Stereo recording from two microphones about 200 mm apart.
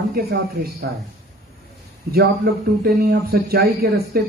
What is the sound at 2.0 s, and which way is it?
A man's voice, 50° right (ahead or behind).